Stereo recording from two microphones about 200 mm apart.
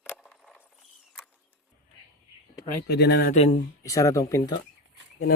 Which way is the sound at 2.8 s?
55° left (ahead or behind).